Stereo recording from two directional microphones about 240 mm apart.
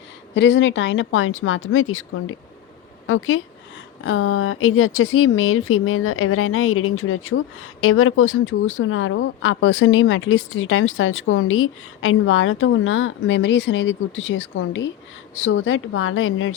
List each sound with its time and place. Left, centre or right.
0.3 s speech: left